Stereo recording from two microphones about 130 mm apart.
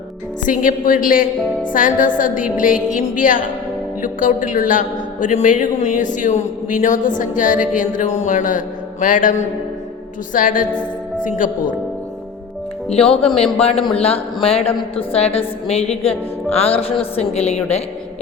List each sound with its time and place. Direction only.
0.4 s a woman's voice: 90° left
7.8 s a man's voice: 75° left (ahead or behind)
13.3 s music: 50° left (ahead or behind)